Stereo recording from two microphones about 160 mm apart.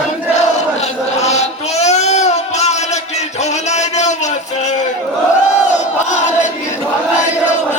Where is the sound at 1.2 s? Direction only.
45° left (ahead or behind).